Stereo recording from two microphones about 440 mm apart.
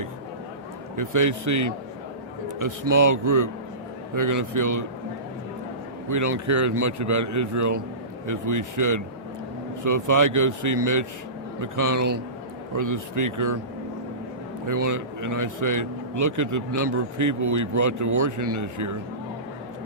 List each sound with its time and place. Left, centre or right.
0.9 s a man's voice: right
6.1 s a man's voice: right
14.8 s a man's voice: right